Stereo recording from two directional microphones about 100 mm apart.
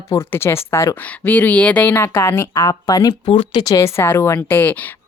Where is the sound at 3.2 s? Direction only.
60° left (ahead or behind).